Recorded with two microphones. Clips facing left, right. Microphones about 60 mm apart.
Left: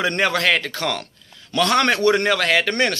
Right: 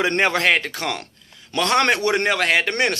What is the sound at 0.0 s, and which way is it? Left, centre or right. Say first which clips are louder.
Speech: right 1 dB; right.